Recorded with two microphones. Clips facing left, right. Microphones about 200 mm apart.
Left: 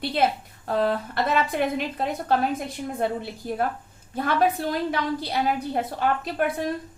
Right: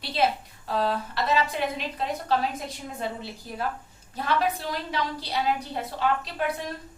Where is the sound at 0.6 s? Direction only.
55° left (ahead or behind).